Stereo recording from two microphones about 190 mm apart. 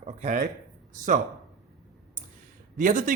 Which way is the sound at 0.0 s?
35° right (ahead or behind).